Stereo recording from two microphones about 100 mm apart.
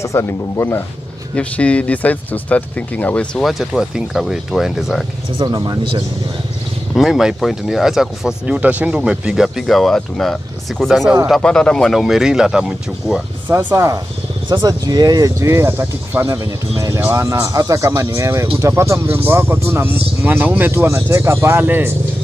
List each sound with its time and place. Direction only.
0.0 s speech: 30° left (ahead or behind)
1.3 s speech: 10° left (ahead or behind)
3.3 s speech: centre (ahead or behind)
5.6 s speech: 50° right (ahead or behind)
7.0 s speech: 5° right (ahead or behind)
13.5 s speech: 25° right (ahead or behind)
14.5 s speech: 40° right (ahead or behind); by 21.9 s 20° right (ahead or behind)